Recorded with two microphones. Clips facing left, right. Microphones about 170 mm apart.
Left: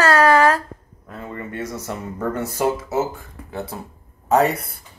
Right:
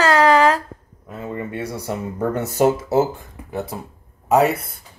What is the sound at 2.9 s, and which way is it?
Speech, 30° right (ahead or behind).